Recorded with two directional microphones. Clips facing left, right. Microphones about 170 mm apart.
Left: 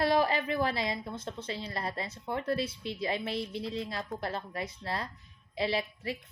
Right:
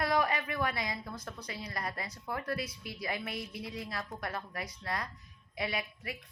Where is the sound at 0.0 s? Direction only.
30° left (ahead or behind).